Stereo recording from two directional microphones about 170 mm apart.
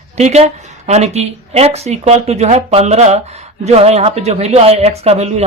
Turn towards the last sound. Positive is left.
turn(degrees=-40)  # may be behind; listen again after turning